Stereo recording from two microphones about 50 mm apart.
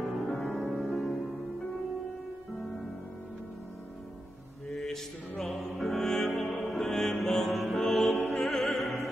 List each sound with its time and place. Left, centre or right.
0.0 s music: centre
4.6 s mantra: centre
5.4 s music: centre
8.3 s opera: centre